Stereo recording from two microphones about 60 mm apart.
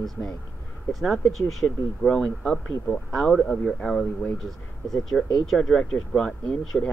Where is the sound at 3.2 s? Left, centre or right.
Centre.